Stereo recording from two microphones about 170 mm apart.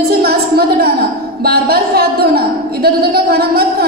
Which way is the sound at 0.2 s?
65° right (ahead or behind).